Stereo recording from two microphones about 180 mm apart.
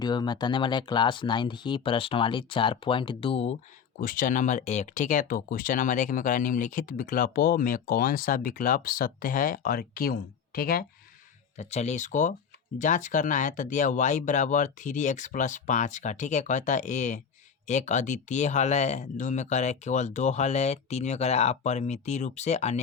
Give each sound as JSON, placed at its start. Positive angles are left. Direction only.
{"t": 0.0, "sound": "speech", "side_deg": 25}
{"t": 4.0, "sound": "speech", "side_deg": 50}
{"t": 11.5, "sound": "speech", "side_deg": 40}